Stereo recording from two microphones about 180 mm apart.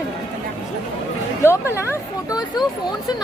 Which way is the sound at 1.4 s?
15° left (ahead or behind).